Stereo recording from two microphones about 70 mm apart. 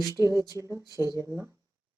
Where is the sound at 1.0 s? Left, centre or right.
Right.